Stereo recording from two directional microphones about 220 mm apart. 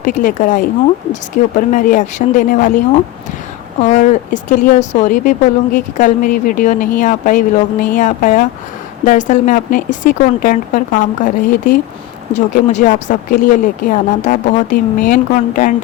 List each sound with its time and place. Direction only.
0.0 s speech: 35° left (ahead or behind)